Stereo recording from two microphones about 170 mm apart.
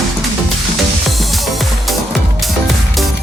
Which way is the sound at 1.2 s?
Centre (ahead or behind).